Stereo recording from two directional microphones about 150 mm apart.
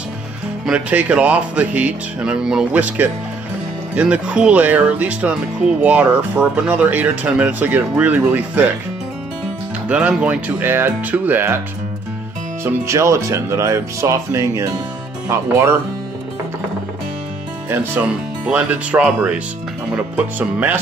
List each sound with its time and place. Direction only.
0.7 s speech: 10° right (ahead or behind)
9.8 s speech: 10° right (ahead or behind)
12.6 s speech: 20° right (ahead or behind)
17.6 s speech: 10° right (ahead or behind)